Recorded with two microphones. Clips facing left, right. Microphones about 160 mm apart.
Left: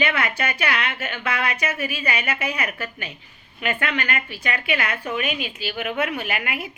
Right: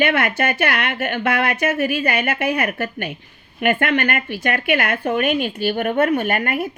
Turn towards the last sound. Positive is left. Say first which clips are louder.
# right 8 dB
turn(degrees=-50)  # may be behind; listen again after turning